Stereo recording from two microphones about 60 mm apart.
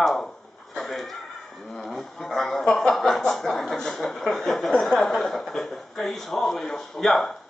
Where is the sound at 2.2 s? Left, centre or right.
Centre.